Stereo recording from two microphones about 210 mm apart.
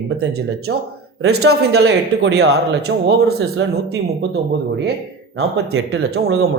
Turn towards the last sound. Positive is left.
turn(degrees=-50)  # may be behind; listen again after turning